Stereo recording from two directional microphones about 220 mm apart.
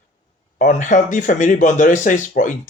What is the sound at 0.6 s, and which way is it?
Speech, 35° left (ahead or behind).